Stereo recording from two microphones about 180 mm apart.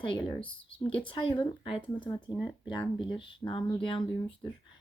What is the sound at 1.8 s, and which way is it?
Speech, 15° left (ahead or behind).